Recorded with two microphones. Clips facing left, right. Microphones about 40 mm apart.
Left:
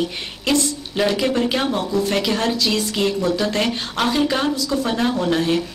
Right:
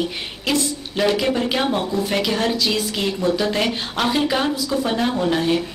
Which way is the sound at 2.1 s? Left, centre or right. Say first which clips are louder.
Even; centre.